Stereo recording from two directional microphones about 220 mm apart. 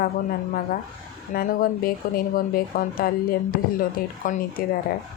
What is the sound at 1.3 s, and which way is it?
Speech, 40° left (ahead or behind).